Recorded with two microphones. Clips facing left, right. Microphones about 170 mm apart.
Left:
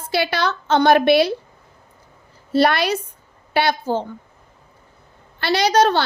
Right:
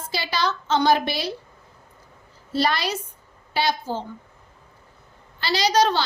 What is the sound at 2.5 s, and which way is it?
A woman's voice, 65° left (ahead or behind).